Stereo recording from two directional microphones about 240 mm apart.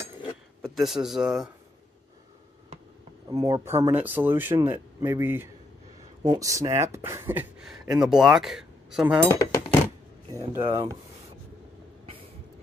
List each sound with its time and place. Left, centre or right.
0.6 s speech: centre
3.3 s speech: centre
9.3 s speech: centre
10.6 s speech: centre